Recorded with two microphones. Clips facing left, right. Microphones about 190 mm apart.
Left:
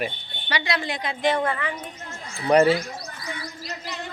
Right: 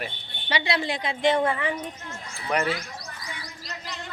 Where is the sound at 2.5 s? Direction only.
35° left (ahead or behind).